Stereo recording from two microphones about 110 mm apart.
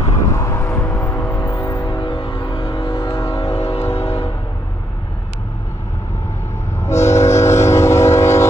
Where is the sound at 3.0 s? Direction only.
25° left (ahead or behind).